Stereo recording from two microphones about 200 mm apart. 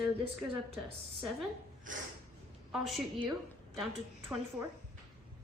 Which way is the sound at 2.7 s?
Centre (ahead or behind).